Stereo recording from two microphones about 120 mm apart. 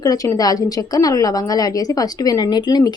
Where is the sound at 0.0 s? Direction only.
30° left (ahead or behind).